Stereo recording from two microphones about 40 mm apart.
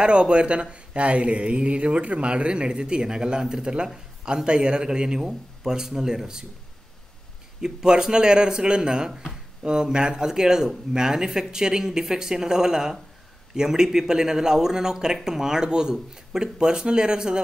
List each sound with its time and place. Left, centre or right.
0.0 s speech: right
7.6 s speech: centre